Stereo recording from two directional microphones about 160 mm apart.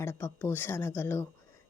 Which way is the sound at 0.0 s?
15° left (ahead or behind).